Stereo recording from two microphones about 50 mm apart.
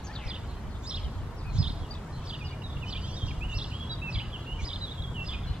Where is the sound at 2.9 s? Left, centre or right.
Right.